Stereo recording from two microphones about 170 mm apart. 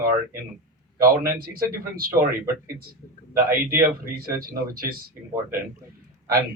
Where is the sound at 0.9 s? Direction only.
60° right (ahead or behind).